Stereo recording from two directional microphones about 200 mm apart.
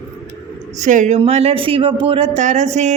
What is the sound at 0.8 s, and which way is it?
Speech, 40° right (ahead or behind).